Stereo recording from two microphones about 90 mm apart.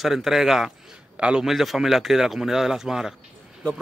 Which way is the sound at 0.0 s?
5° right (ahead or behind).